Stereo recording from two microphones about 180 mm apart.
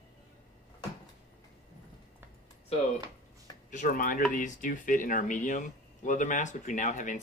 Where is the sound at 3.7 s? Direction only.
50° left (ahead or behind).